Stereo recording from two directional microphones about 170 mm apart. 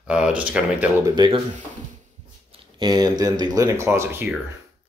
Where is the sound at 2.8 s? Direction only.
25° right (ahead or behind).